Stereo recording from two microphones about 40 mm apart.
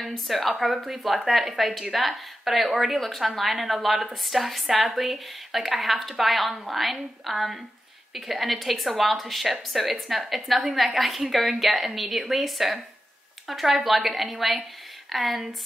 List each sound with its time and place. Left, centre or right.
0.3 s a woman's voice: centre